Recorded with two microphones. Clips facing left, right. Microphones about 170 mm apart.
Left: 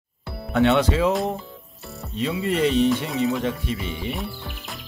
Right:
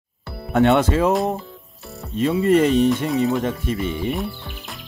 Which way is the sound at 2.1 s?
45° right (ahead or behind).